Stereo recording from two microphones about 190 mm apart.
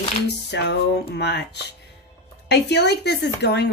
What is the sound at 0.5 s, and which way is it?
Speech, 60° left (ahead or behind).